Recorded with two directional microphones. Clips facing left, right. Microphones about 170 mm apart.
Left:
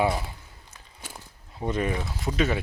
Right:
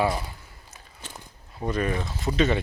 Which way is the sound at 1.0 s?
10° left (ahead or behind).